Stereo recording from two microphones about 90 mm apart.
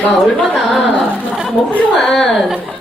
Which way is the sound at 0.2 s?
Centre (ahead or behind).